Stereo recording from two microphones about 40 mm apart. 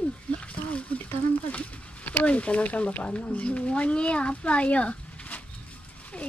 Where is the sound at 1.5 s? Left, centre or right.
Left.